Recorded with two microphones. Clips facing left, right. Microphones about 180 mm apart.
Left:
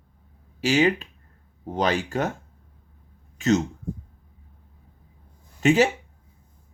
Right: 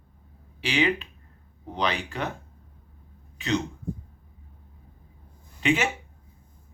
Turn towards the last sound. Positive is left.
turn(degrees=40)  # may be behind; listen again after turning